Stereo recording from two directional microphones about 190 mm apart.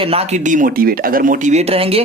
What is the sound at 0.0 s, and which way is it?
Speech, 30° right (ahead or behind).